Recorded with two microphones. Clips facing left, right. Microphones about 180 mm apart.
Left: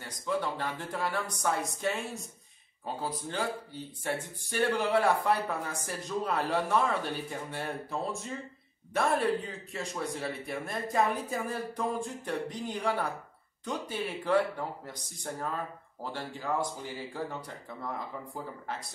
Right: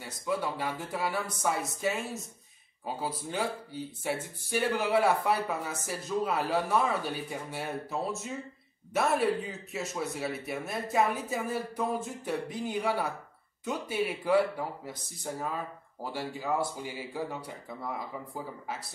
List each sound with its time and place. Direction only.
0.0 s speech: 5° right (ahead or behind)
3.0 s speech: 10° right (ahead or behind)